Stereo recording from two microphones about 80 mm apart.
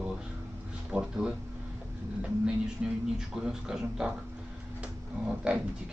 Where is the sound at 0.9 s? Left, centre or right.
Centre.